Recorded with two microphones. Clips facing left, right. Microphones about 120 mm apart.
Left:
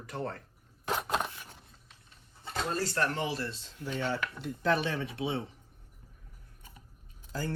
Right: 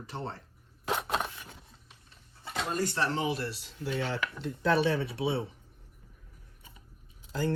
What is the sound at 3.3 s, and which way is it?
Speech, 60° right (ahead or behind).